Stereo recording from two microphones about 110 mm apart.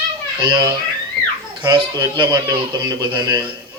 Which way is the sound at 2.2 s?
30° right (ahead or behind).